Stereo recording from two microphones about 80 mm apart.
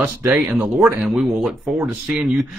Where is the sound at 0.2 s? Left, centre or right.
Right.